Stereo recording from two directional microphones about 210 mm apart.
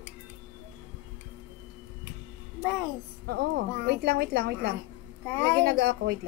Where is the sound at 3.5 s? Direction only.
50° right (ahead or behind).